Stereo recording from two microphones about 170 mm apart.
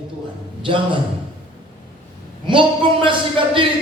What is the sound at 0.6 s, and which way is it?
Speech, 30° right (ahead or behind).